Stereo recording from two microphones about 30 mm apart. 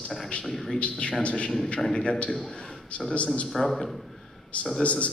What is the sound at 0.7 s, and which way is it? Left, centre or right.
A man's voice, left.